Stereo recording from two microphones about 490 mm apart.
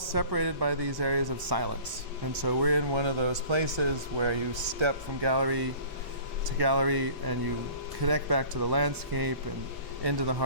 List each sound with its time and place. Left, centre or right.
0.1 s speech: right